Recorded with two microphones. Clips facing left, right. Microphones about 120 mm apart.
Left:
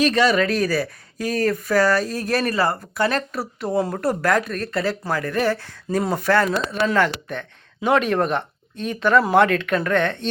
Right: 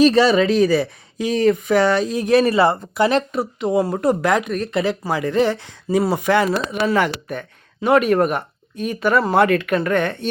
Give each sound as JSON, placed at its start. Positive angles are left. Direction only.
{"t": 0.0, "sound": "speech", "side_deg": -30}